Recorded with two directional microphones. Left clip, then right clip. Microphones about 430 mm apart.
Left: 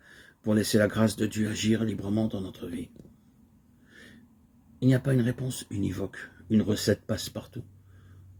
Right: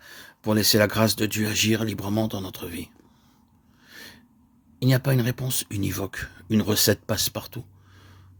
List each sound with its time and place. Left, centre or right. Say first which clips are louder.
0.0 s speech: right 4 dB; right
3.8 s gasp: right 8 dB; right
4.8 s speech: right 2 dB; right